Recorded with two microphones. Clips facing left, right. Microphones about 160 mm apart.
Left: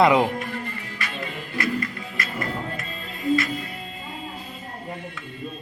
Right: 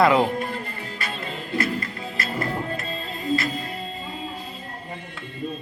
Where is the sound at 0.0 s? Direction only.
15° left (ahead or behind).